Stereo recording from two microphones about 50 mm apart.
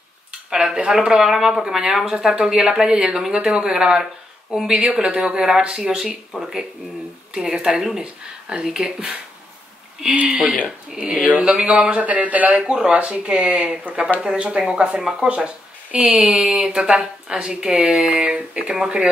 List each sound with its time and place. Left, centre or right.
0.5 s speech: centre
10.1 s speech: right
10.9 s speech: centre
11.5 s speech: right